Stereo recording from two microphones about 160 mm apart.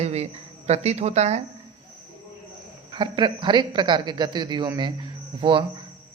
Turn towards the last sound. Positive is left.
turn(degrees=-30)  # may be behind; listen again after turning